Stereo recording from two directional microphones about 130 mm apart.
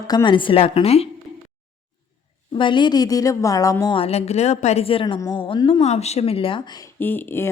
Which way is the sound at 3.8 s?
45° left (ahead or behind).